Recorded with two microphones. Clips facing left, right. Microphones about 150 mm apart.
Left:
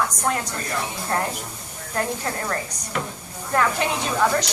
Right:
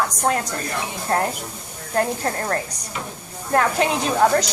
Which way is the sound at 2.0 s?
50° right (ahead or behind).